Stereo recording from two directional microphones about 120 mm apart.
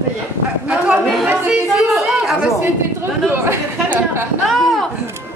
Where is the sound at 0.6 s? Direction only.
10° right (ahead or behind).